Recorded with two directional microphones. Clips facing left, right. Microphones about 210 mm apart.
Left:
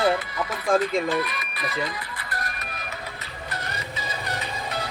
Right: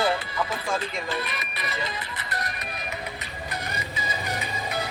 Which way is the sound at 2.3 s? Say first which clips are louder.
Right 1 dB; 20° right (ahead or behind).